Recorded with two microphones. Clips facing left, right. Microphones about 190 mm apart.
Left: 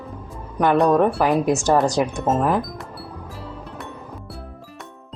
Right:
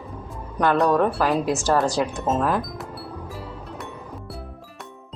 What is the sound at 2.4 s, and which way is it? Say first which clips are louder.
Speech: left 2 dB; 15° left (ahead or behind).